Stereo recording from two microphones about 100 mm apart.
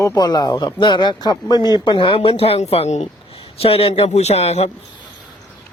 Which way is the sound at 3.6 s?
80° left.